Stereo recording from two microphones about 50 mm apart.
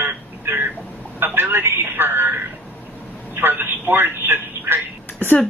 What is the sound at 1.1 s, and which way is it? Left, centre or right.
A woman's voice, right.